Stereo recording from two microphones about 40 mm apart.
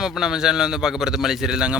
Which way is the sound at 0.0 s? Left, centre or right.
Centre.